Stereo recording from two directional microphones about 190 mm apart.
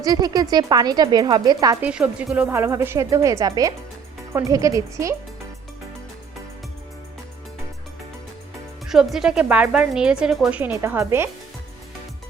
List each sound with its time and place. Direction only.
0.0 s speech: 20° right (ahead or behind)
1.8 s a woman's voice: 5° right (ahead or behind)
8.9 s speech: centre (ahead or behind)